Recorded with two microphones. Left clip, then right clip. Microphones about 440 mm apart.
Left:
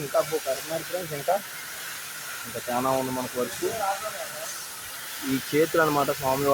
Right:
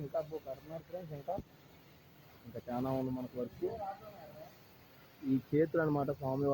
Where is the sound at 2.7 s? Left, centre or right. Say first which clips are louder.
Left 12 dB; right.